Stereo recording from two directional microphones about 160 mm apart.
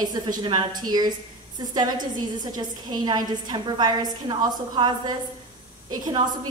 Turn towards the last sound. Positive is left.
turn(degrees=-25)  # may be behind; listen again after turning